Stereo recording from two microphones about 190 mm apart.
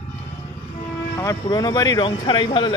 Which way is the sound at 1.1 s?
20° left (ahead or behind).